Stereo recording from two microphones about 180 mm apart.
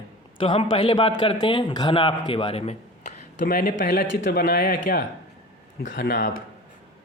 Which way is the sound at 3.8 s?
90° left.